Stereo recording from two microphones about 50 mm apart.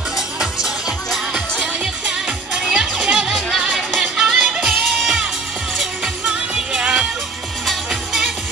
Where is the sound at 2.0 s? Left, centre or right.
Centre.